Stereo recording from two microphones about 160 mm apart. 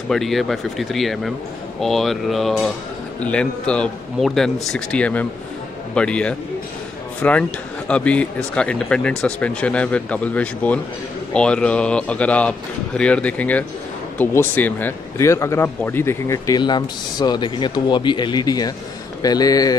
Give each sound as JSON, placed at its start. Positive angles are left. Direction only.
{"t": 0.1, "sound": "speech", "side_deg": 0}